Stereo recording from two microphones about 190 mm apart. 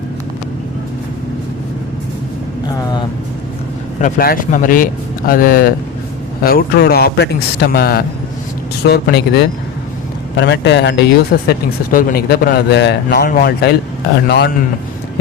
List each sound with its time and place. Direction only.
2.6 s vehicle: 20° left (ahead or behind)
4.0 s a man's voice: 50° left (ahead or behind); by 11.0 s 65° left (ahead or behind)
11.4 s a man's voice: 50° left (ahead or behind)